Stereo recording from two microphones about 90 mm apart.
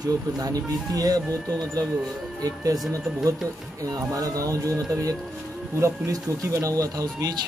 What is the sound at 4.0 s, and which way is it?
Speech, 40° right (ahead or behind).